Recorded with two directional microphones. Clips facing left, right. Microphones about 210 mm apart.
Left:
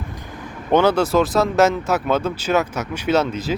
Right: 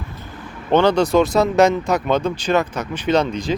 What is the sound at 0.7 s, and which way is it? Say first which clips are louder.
Speech: right 1 dB; 10° left (ahead or behind).